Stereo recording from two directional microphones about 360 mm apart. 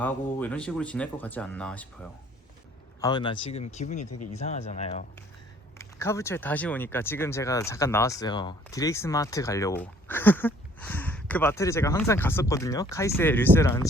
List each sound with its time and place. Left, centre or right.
0.0 s speech: centre
3.0 s speech: centre
5.8 s speech: centre